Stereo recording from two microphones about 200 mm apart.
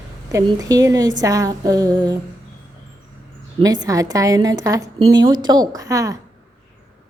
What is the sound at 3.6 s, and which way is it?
A woman's voice, 20° right (ahead or behind).